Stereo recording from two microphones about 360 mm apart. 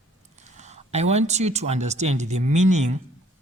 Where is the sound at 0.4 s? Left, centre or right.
Centre.